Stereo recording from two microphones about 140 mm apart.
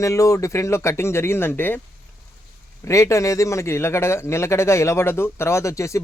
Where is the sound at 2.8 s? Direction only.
20° left (ahead or behind).